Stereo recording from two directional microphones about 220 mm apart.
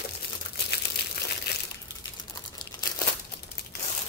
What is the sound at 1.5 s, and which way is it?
Crumpling, 45° left (ahead or behind).